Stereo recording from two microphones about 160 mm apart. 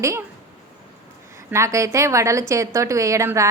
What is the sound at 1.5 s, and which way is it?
A woman's voice, 20° right (ahead or behind).